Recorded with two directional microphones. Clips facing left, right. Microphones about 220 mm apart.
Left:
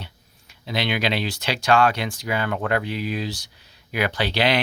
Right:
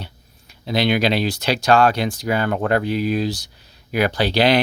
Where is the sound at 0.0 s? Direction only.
40° right (ahead or behind).